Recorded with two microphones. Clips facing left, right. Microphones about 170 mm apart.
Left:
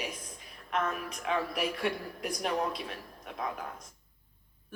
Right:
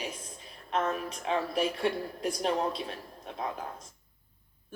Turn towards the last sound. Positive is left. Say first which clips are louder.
# right 1 dB
turn(degrees=-30)  # may be behind; listen again after turning